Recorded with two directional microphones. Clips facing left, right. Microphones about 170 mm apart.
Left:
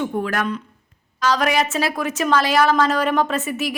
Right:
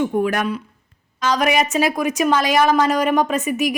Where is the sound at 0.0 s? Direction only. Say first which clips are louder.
Right 3 dB; 15° right (ahead or behind).